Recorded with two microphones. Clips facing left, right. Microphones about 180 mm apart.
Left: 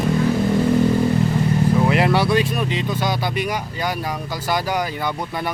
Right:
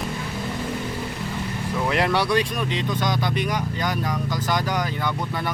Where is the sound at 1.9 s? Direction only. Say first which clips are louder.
Left 4 dB; 5° left (ahead or behind).